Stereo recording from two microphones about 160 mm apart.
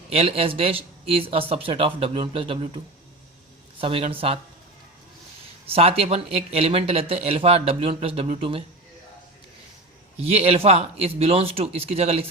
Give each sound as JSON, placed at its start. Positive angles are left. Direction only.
{"t": 0.1, "sound": "speech", "side_deg": -40}
{"t": 5.6, "sound": "speech", "side_deg": -40}
{"t": 10.2, "sound": "speech", "side_deg": -40}